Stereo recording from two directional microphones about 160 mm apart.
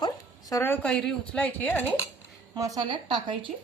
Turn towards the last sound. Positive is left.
turn(degrees=-30)  # may be behind; listen again after turning